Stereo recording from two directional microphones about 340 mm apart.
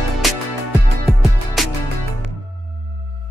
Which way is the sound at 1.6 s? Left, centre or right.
Centre.